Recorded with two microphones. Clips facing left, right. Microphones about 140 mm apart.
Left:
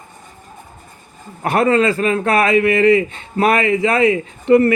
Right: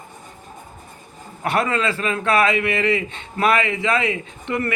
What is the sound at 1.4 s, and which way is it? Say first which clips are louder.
A man's voice: left 7 dB; 40° left (ahead or behind).